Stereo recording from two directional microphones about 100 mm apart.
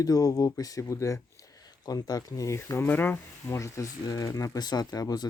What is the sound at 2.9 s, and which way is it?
Speech, 15° left (ahead or behind).